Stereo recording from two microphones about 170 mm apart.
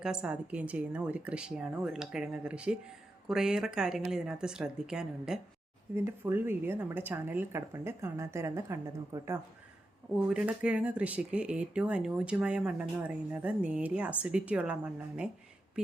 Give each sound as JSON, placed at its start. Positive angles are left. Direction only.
{"t": 0.0, "sound": "speech", "side_deg": -5}
{"t": 10.3, "sound": "speech", "side_deg": -5}